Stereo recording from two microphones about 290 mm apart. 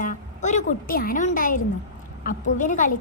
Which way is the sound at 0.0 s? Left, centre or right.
Left.